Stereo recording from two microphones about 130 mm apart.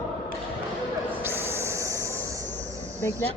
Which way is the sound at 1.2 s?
15° right (ahead or behind).